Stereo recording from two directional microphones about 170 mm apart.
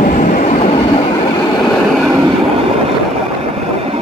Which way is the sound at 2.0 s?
25° right (ahead or behind).